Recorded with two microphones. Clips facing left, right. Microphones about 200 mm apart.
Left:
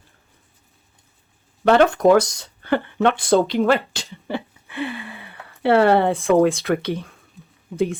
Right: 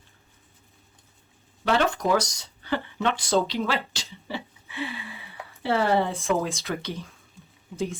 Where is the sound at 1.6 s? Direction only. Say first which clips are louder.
Left 9 dB; 55° left (ahead or behind).